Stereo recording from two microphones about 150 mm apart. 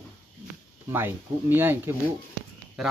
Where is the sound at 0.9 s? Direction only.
15° right (ahead or behind).